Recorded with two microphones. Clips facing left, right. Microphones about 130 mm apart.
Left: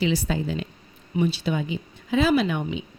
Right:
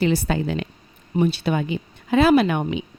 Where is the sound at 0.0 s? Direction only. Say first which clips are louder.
Right 3 dB; 55° right (ahead or behind).